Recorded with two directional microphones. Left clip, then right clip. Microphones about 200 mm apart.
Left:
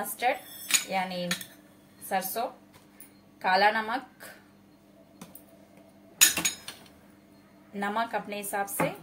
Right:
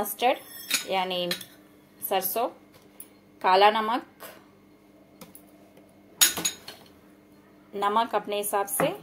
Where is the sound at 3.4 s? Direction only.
35° right (ahead or behind).